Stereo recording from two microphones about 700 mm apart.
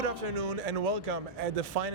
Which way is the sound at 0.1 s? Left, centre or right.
Right.